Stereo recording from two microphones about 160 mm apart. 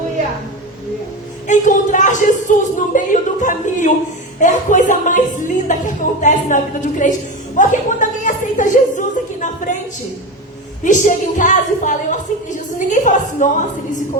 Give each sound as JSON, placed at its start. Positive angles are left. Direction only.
{"t": 1.5, "sound": "a woman's voice", "side_deg": 50}
{"t": 10.8, "sound": "a woman's voice", "side_deg": 50}